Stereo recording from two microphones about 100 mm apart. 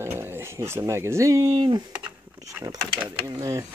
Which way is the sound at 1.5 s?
45° right (ahead or behind).